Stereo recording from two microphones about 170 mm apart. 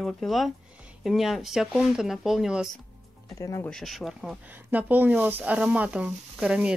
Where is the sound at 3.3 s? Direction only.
20° left (ahead or behind).